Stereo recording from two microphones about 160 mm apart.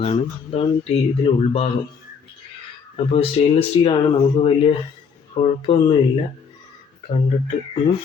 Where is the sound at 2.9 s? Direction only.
35° left (ahead or behind).